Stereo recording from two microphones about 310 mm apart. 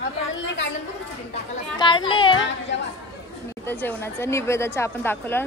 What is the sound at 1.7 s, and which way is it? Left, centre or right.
Children playing, centre.